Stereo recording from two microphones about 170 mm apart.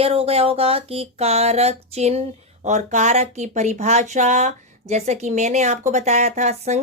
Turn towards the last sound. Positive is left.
turn(degrees=-40)  # may be behind; listen again after turning